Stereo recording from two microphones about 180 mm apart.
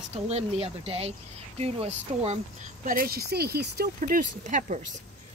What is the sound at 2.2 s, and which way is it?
Speech, 45° right (ahead or behind).